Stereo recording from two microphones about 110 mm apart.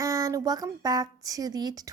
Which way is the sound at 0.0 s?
30° right (ahead or behind).